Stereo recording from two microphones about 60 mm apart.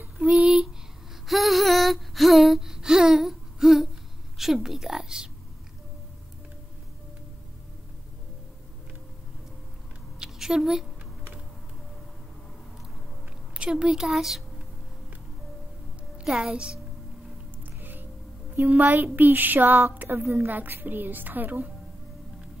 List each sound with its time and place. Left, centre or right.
0.3 s a sound: centre
10.1 s a sound: centre
13.6 s a woman's voice: centre
16.3 s a woman's voice: centre
17.7 s music: right
18.5 s a woman's voice: right